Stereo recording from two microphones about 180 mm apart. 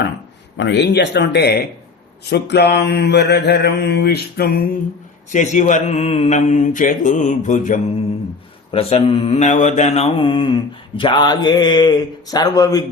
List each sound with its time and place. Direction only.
0.5 s speech: 80° left
2.3 s mantra: 65° left (ahead or behind)
5.3 s mantra: 45° left (ahead or behind)
8.7 s mantra: 35° left (ahead or behind)